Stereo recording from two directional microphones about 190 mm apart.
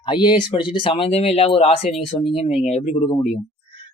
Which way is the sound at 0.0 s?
25° left (ahead or behind).